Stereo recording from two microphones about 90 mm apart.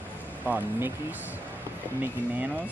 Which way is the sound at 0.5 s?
20° right (ahead or behind).